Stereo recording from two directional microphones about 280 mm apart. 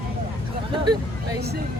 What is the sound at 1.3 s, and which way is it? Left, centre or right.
Speech, right.